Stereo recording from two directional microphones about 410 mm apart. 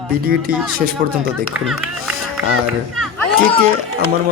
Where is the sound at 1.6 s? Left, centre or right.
Centre.